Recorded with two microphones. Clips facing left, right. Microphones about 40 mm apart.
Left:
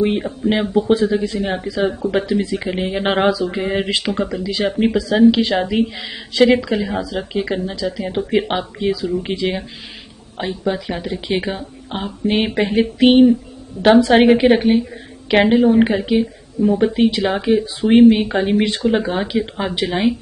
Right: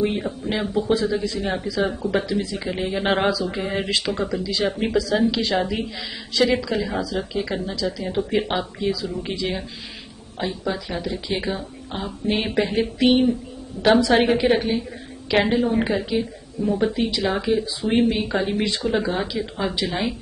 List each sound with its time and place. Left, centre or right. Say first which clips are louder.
0.0 s speech: left 5 dB; left
2.4 s speech: left 6 dB; left
2.7 s speech: left 1 dB; left
4.5 s speech: left 5 dB; left
14.4 s a woman's voice: left 6 dB; left
18.1 s speech: left 6 dB; left